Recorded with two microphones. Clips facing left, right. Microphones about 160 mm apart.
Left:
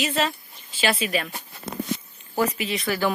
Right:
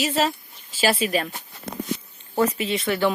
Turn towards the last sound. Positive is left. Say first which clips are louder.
# right 2 dB
turn(degrees=-25)  # may be behind; listen again after turning